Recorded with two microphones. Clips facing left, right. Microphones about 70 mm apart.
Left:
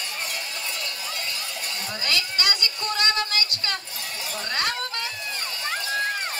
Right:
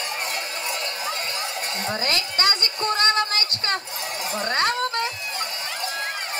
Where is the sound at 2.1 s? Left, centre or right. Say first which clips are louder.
Even; right.